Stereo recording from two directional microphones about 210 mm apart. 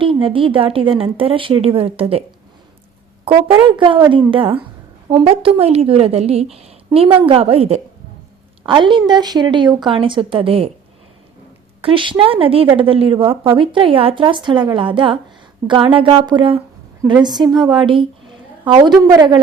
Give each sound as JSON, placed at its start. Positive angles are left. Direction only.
{"t": 0.0, "sound": "a woman's voice", "side_deg": -25}
{"t": 3.2, "sound": "a woman's voice", "side_deg": -25}
{"t": 11.8, "sound": "a woman's voice", "side_deg": -25}